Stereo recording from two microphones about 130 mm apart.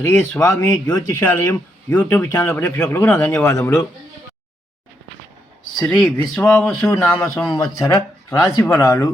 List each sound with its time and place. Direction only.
0.0 s speech: 20° left (ahead or behind)
5.8 s speech: 5° left (ahead or behind)
7.5 s speech: 30° left (ahead or behind)